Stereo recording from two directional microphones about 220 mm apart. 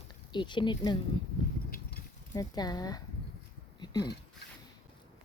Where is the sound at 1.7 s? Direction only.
45° left (ahead or behind).